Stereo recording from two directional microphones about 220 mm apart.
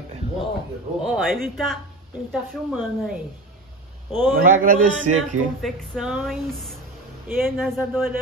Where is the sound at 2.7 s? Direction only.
Centre (ahead or behind).